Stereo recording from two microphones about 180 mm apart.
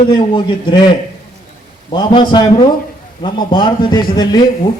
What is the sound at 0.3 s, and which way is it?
Speech, 25° left (ahead or behind).